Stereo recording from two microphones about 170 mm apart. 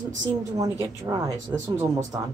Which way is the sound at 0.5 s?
20° right (ahead or behind).